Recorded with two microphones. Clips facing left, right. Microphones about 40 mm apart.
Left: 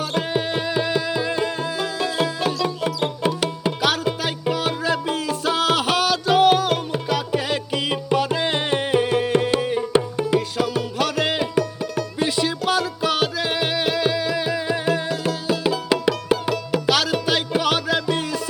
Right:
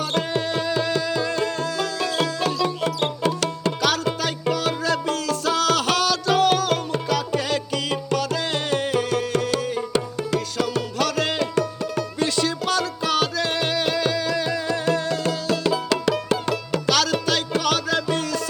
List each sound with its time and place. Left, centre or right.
0.1 s music: centre